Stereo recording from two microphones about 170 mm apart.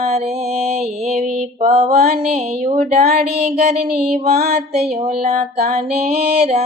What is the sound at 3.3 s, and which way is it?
Music, 40° right (ahead or behind).